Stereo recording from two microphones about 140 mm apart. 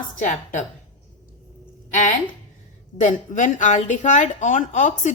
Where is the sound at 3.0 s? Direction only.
65° left (ahead or behind).